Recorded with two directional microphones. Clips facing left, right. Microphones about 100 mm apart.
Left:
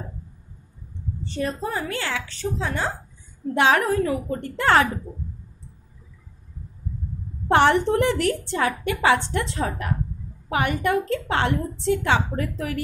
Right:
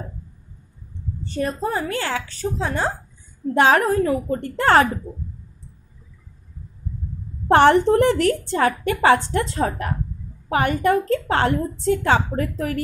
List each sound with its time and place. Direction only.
1.2 s a woman's voice: 40° right (ahead or behind)
7.4 s a woman's voice: 45° right (ahead or behind)